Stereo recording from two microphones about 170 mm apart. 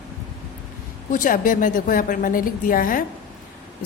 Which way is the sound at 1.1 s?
55° left (ahead or behind).